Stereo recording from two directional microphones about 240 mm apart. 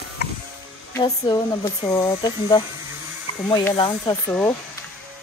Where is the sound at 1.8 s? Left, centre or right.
Centre.